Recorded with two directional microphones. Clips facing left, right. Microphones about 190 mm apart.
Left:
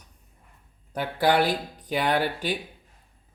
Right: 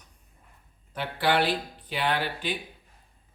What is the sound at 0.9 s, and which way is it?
Speech, 40° left (ahead or behind).